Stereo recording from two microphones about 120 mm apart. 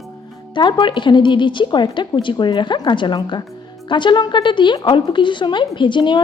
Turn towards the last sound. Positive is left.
turn(degrees=40)  # may be behind; listen again after turning